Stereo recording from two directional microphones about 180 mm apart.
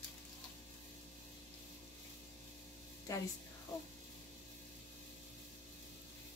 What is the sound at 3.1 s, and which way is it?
Speech, 20° left (ahead or behind).